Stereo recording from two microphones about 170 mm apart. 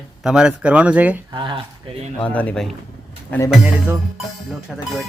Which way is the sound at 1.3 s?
30° right (ahead or behind).